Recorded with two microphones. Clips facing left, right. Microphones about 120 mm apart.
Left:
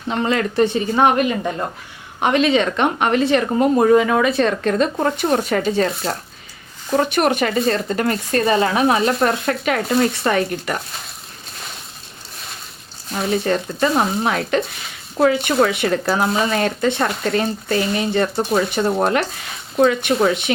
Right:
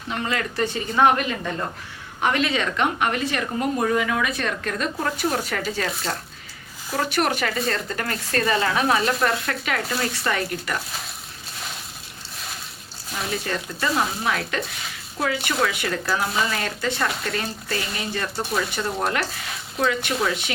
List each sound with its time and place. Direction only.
0.1 s speech: 30° left (ahead or behind)
6.9 s speech: 20° left (ahead or behind)
13.5 s speech: 25° left (ahead or behind)